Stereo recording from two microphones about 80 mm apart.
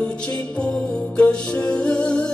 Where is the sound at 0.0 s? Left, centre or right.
Centre.